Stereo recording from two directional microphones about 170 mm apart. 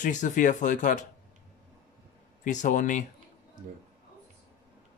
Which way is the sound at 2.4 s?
45° left (ahead or behind).